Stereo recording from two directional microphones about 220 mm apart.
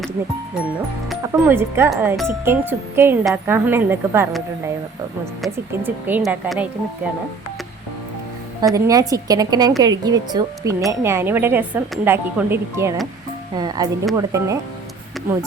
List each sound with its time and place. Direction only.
1.3 s speech: 10° right (ahead or behind)
5.5 s speech: 10° right (ahead or behind)
8.6 s speech: 15° right (ahead or behind)